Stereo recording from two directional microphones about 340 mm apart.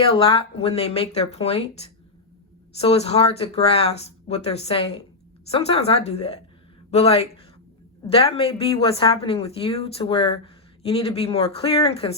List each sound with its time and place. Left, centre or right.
0.1 s a woman's voice: centre